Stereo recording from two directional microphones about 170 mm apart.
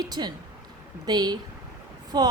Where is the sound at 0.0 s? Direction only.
25° right (ahead or behind).